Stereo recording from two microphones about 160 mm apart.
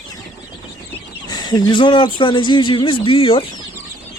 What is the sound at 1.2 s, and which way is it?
A man's voice, 25° left (ahead or behind).